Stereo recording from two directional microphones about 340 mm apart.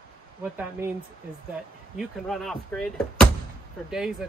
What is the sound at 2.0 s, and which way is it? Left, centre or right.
Speech, centre.